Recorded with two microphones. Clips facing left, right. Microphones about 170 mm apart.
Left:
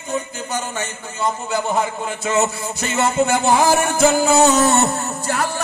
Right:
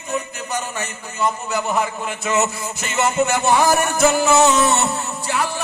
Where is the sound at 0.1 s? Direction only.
30° left (ahead or behind).